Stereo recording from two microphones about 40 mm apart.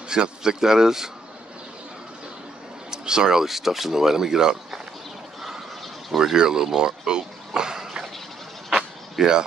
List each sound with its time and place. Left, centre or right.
0.1 s speech: centre
2.9 s speech: centre
6.1 s speech: centre
8.6 s vehicle: centre